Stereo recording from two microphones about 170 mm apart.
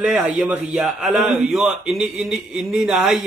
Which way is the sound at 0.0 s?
5° right (ahead or behind).